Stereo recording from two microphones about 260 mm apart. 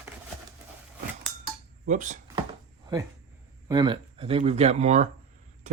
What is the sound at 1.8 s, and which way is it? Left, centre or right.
Speech, right.